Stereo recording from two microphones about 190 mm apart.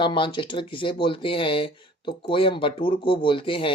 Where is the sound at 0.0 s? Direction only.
25° left (ahead or behind).